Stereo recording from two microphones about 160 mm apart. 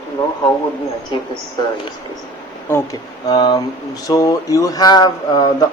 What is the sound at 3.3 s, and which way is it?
Speech, 25° left (ahead or behind).